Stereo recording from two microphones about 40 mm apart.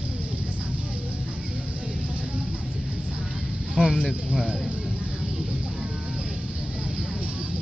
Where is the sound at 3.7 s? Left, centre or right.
Right.